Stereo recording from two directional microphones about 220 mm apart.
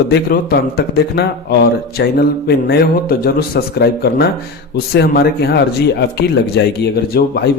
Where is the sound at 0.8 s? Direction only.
45° left (ahead or behind).